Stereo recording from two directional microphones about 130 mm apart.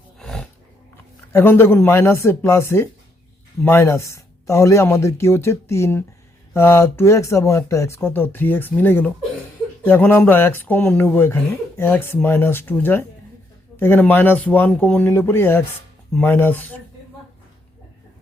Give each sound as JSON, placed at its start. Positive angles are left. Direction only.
{"t": 0.2, "sound": "snort", "side_deg": 5}
{"t": 1.3, "sound": "speech", "side_deg": 15}